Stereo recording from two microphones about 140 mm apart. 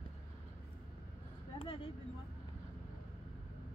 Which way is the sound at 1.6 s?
40° left (ahead or behind).